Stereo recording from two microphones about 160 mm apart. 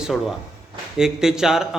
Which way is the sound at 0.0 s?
5° right (ahead or behind).